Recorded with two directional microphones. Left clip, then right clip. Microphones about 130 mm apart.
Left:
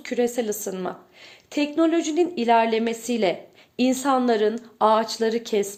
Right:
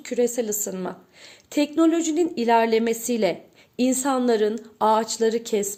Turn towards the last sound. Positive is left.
turn(degrees=-30)  # may be behind; listen again after turning